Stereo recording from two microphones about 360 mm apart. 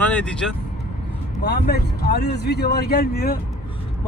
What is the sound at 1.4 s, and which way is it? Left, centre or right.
Speech, left.